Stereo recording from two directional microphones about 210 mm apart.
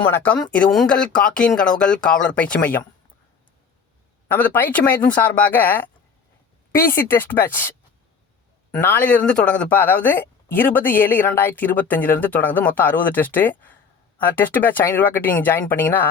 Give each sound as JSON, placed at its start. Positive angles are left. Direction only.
{"t": 0.1, "sound": "speech", "side_deg": 10}
{"t": 4.3, "sound": "speech", "side_deg": 10}
{"t": 6.9, "sound": "speech", "side_deg": 10}
{"t": 8.7, "sound": "speech", "side_deg": 10}